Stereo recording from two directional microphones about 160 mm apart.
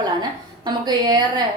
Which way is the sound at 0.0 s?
25° right (ahead or behind).